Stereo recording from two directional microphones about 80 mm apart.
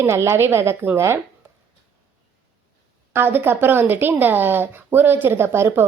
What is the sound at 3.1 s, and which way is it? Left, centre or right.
Speech, right.